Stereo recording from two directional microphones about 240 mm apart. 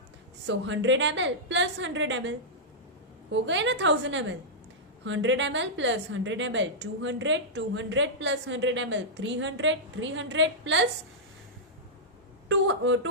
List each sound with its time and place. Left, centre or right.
0.4 s a woman's voice: right
3.3 s a woman's voice: right
12.5 s a woman's voice: right